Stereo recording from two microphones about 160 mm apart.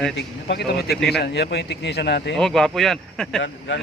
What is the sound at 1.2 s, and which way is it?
Speech, 90° left.